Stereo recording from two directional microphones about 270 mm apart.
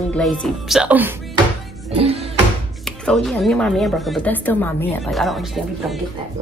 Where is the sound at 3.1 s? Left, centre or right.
Centre.